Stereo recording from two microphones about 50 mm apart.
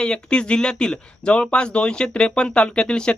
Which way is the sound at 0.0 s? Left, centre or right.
Centre.